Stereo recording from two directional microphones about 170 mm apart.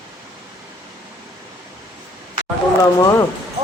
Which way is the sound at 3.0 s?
20° left (ahead or behind).